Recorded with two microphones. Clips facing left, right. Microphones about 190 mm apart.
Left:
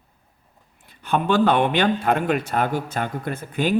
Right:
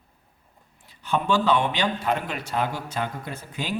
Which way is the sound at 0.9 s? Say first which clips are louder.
Left 3 dB; 55° left (ahead or behind).